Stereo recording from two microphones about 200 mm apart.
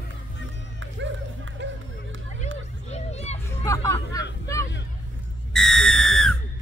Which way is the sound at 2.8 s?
35° left (ahead or behind).